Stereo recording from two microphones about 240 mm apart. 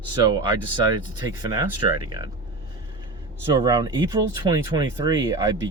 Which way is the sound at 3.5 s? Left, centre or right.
Centre.